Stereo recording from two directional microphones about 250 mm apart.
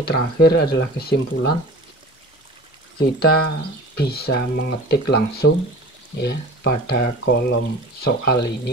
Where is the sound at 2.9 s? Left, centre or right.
Left.